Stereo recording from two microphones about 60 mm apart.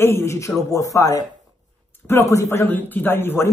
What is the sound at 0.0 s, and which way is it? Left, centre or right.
Speech, left.